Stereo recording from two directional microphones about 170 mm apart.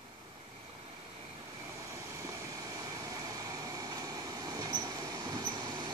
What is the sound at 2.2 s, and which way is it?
Vehicle, 20° right (ahead or behind).